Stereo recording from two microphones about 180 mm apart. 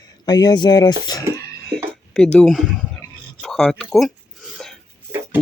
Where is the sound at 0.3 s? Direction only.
20° left (ahead or behind).